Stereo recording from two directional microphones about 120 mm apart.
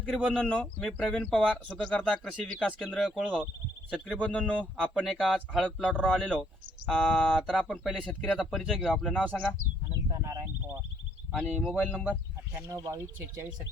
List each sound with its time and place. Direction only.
0.3 s speech: 5° left (ahead or behind)
10.1 s a sound: 30° right (ahead or behind)
11.4 s speech: 10° left (ahead or behind)
12.6 s speech: 30° right (ahead or behind)